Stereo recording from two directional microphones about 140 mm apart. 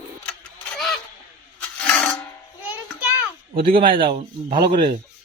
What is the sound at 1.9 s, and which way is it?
Music, 5° left (ahead or behind).